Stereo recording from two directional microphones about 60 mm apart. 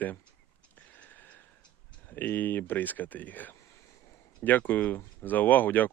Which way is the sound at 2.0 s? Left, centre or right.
Left.